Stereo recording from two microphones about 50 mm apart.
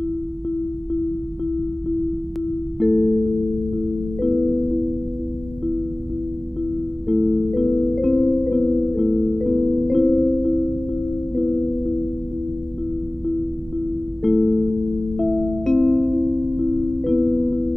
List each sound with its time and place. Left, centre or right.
2.8 s music: centre
4.2 s music: centre
7.1 s music: centre
14.2 s music: centre